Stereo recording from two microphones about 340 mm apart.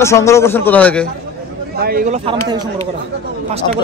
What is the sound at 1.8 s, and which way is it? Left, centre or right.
Speech, right.